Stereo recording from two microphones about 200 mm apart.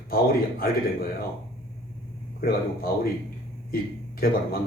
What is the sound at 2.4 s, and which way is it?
Speech, 50° left (ahead or behind).